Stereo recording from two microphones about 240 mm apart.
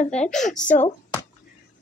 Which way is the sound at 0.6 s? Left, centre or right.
Left.